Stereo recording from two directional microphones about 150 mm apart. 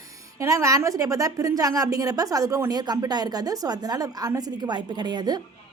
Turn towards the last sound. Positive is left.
turn(degrees=-25)  # may be behind; listen again after turning